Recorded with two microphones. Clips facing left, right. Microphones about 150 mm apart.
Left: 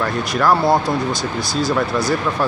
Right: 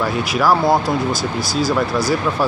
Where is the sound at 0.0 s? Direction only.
5° right (ahead or behind).